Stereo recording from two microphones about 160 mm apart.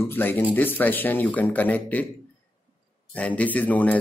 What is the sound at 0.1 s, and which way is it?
Speech, 10° left (ahead or behind).